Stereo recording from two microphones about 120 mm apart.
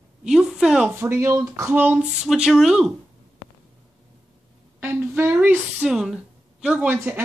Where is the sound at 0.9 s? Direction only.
20° right (ahead or behind).